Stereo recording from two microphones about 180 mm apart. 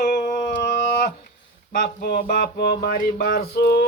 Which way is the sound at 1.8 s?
60° left (ahead or behind).